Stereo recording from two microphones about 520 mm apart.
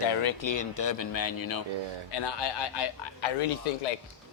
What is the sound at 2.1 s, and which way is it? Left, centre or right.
Speech, left.